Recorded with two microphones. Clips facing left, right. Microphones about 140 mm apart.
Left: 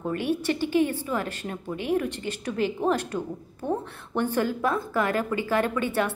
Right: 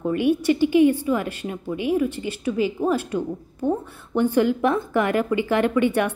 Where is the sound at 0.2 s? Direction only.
15° right (ahead or behind).